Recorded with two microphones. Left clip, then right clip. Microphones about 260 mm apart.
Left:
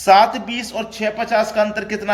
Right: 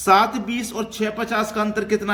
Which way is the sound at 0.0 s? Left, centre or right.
Centre.